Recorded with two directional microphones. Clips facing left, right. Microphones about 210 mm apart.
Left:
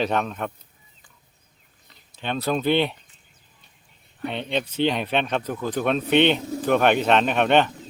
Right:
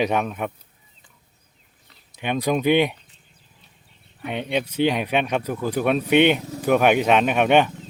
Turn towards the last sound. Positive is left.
turn(degrees=-10)  # may be behind; listen again after turning